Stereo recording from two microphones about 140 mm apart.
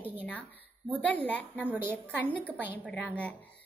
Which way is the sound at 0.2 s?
10° left (ahead or behind).